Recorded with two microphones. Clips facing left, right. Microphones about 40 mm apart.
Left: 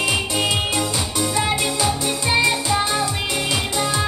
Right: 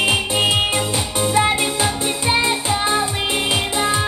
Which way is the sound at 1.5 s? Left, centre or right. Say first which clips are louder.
Right 2 dB; right.